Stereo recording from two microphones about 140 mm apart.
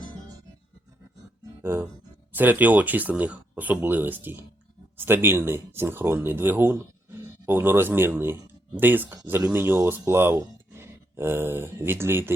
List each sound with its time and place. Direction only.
1.6 s speech: 15° right (ahead or behind)